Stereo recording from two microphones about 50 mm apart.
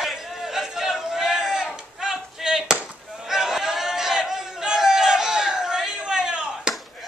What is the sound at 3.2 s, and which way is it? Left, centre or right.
Crowd, centre.